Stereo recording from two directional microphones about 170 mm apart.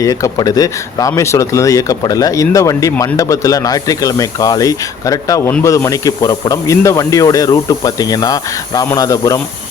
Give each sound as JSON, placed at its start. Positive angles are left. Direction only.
{"t": 0.0, "sound": "speech", "side_deg": 20}